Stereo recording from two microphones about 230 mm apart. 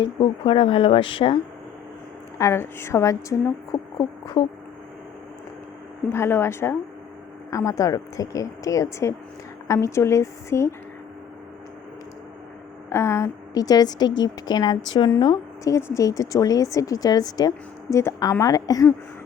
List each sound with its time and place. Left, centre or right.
0.0 s speech: left
2.4 s a woman's voice: centre
4.4 s speech: left
6.1 s a woman's voice: centre
12.9 s a woman's voice: centre